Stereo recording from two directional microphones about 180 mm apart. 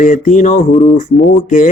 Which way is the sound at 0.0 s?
45° left (ahead or behind).